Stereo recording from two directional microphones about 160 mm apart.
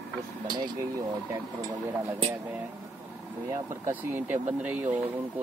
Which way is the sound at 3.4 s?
15° right (ahead or behind).